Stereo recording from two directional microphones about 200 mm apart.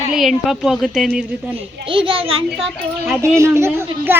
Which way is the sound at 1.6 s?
25° right (ahead or behind).